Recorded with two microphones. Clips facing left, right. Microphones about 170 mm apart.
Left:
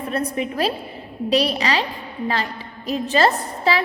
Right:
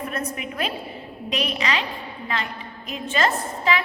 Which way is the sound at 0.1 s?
35° left (ahead or behind).